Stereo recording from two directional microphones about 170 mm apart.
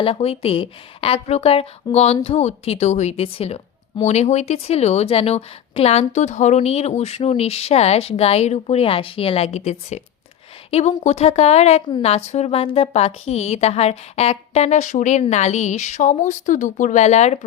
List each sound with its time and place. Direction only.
0.0 s a woman's voice: 35° left (ahead or behind)